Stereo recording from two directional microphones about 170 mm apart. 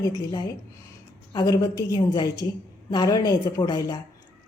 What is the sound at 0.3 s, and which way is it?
A woman's voice, 25° left (ahead or behind).